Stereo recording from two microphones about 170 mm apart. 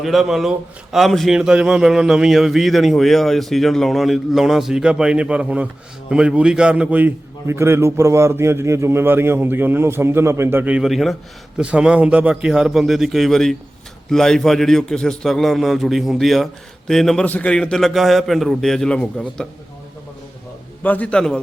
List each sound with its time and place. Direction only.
0.0 s a man's voice: centre (ahead or behind)
20.8 s a man's voice: 10° left (ahead or behind)